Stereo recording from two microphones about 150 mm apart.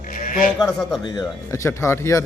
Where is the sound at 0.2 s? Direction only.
70° left (ahead or behind).